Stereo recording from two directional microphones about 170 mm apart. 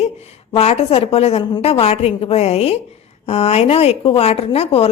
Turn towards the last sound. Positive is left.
turn(degrees=35)  # may be behind; listen again after turning